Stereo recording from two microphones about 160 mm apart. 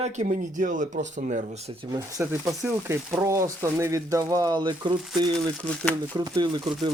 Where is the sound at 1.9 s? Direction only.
20° right (ahead or behind).